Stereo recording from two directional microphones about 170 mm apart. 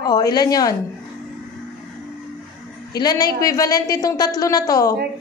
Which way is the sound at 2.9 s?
25° left (ahead or behind).